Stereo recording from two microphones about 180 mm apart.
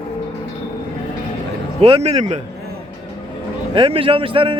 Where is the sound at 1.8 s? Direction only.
35° right (ahead or behind).